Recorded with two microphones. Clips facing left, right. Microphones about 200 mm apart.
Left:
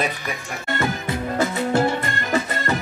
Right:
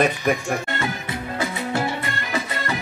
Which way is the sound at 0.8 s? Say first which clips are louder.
Left 3 dB; 45° left (ahead or behind).